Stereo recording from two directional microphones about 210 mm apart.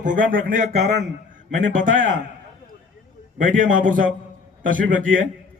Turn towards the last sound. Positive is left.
turn(degrees=-40)  # may be behind; listen again after turning